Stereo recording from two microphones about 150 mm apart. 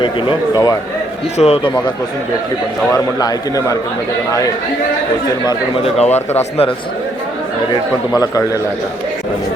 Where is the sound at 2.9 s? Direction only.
25° left (ahead or behind).